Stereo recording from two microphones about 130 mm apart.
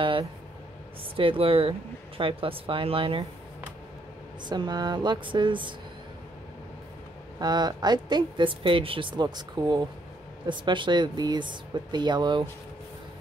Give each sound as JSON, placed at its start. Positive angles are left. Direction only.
{"t": 1.1, "sound": "speech", "side_deg": -45}
{"t": 4.5, "sound": "a woman's voice", "side_deg": -35}
{"t": 7.3, "sound": "a woman's voice", "side_deg": -30}